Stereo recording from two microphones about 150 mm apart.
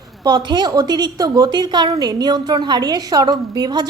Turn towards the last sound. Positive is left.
turn(degrees=-25)  # may be behind; listen again after turning